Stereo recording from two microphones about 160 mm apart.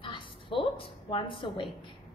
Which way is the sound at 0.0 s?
30° left (ahead or behind).